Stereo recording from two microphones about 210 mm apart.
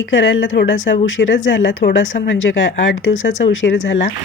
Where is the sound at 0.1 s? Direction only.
60° left (ahead or behind).